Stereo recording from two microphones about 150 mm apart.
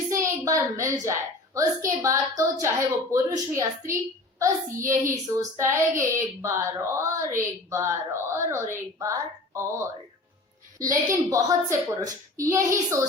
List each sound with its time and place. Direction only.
0.2 s child singing: 20° right (ahead or behind)
7.7 s speech: 20° right (ahead or behind)
10.8 s child singing: 20° right (ahead or behind)